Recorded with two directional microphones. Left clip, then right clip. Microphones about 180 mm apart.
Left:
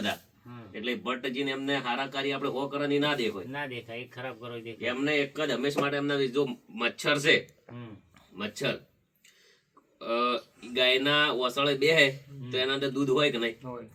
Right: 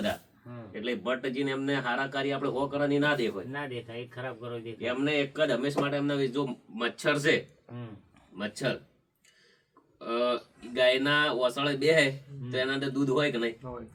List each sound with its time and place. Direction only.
0.7 s speech: 10° right (ahead or behind)
3.8 s speech: 10° left (ahead or behind)
4.8 s speech: 15° right (ahead or behind)
10.0 s speech: 20° right (ahead or behind)